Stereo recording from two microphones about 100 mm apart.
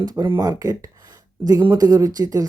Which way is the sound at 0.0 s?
40° right (ahead or behind).